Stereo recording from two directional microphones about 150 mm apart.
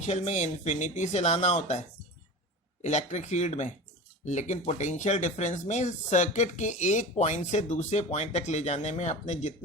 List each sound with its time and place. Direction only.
0.1 s speech: 45° left (ahead or behind)
2.8 s speech: 50° left (ahead or behind)